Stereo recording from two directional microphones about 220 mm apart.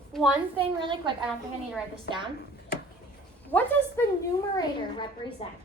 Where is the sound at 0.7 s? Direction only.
20° right (ahead or behind).